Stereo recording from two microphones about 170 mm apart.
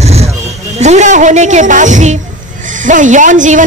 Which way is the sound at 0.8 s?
45° right (ahead or behind).